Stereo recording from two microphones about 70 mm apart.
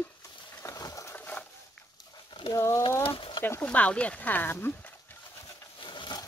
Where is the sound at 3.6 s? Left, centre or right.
Left.